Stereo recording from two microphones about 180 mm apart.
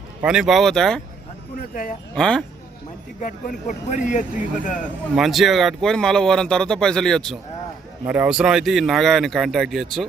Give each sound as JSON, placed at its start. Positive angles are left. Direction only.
{"t": 0.2, "sound": "speech", "side_deg": -5}
{"t": 1.5, "sound": "a man's voice", "side_deg": 50}
{"t": 2.1, "sound": "speech", "side_deg": 5}
{"t": 3.2, "sound": "a man's voice", "side_deg": 45}
{"t": 5.1, "sound": "speech", "side_deg": 0}
{"t": 8.0, "sound": "speech", "side_deg": -10}